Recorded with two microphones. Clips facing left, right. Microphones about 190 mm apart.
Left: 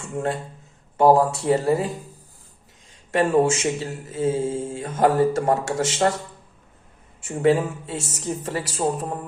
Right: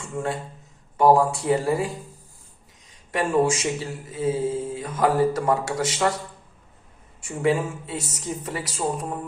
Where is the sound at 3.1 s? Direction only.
25° left (ahead or behind).